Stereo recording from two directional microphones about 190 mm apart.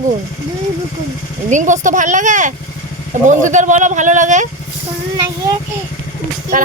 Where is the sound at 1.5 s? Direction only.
40° right (ahead or behind).